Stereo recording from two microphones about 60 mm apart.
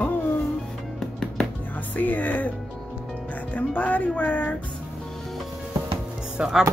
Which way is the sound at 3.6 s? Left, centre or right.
Left.